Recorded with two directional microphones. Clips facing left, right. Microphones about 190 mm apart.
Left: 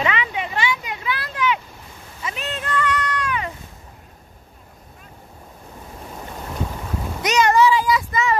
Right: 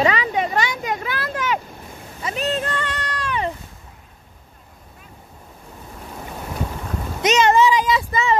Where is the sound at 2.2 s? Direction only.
35° right (ahead or behind).